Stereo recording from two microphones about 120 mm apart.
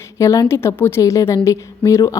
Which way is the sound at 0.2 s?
25° left (ahead or behind).